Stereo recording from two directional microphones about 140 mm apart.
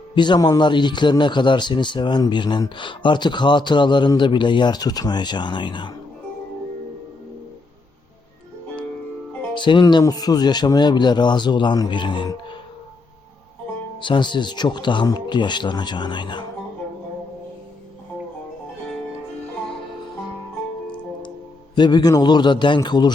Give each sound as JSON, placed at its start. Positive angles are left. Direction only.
{"t": 0.1, "sound": "speech", "side_deg": 35}
{"t": 9.6, "sound": "speech", "side_deg": 35}
{"t": 14.0, "sound": "speech", "side_deg": 35}
{"t": 21.8, "sound": "speech", "side_deg": 30}